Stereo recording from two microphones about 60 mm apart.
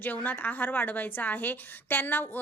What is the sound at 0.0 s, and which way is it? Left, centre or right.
A woman's voice, left.